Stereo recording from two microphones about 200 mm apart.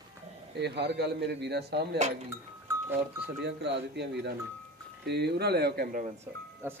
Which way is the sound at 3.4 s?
60° right (ahead or behind).